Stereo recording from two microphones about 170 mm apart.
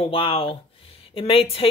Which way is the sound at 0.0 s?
35° left (ahead or behind).